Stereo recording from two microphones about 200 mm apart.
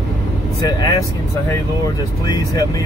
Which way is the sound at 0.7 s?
20° left (ahead or behind).